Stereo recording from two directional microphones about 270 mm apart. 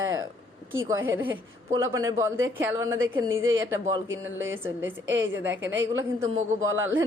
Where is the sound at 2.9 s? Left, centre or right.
Right.